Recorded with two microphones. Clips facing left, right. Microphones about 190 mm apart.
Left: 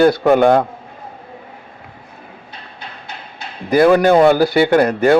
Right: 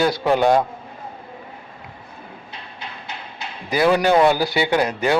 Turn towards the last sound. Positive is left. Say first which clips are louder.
# left 7 dB
turn(degrees=55)  # may be behind; listen again after turning